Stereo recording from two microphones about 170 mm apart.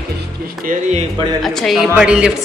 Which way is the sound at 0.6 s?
50° right (ahead or behind).